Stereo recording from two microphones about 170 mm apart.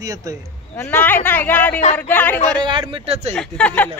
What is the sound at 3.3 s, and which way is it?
Speech, 5° left (ahead or behind).